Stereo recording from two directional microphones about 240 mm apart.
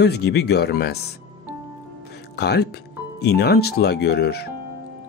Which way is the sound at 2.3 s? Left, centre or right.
Left.